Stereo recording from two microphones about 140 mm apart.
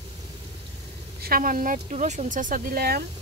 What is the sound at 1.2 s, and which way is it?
Speech, 90° right.